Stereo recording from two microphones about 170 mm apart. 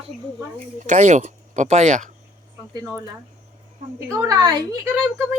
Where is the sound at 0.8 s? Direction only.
45° right (ahead or behind).